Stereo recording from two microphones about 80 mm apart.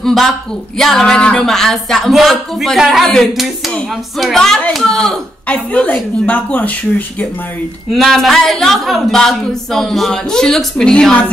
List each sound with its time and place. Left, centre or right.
0.0 s a woman's voice: centre
5.5 s speech: centre
7.9 s a woman's voice: centre